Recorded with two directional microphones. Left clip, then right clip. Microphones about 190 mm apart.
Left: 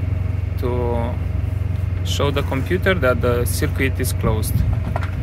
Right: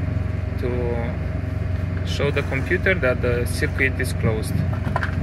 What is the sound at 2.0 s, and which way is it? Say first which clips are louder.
Speech: left 2 dB; 15° left (ahead or behind).